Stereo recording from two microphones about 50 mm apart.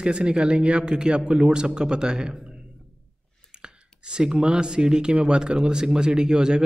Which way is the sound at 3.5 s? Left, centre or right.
Centre.